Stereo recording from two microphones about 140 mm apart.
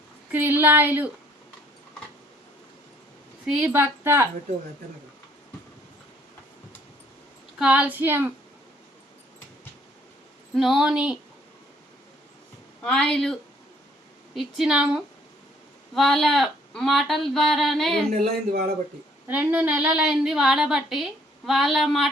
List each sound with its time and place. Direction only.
0.3 s a woman's voice: 15° right (ahead or behind)
3.4 s a woman's voice: 10° right (ahead or behind)
7.6 s a woman's voice: 10° right (ahead or behind)
10.5 s a woman's voice: centre (ahead or behind)
12.8 s a woman's voice: 5° left (ahead or behind)
14.3 s a woman's voice: 5° right (ahead or behind)
18.1 s speech: 70° right (ahead or behind)
19.3 s a woman's voice: 10° right (ahead or behind)